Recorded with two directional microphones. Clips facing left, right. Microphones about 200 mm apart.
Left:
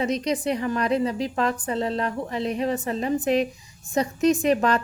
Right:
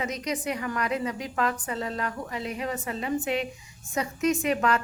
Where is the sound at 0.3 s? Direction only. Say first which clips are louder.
Left 6 dB; 30° left (ahead or behind).